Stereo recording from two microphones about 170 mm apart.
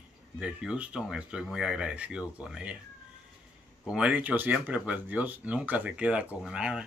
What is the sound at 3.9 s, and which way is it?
Speech, 5° right (ahead or behind).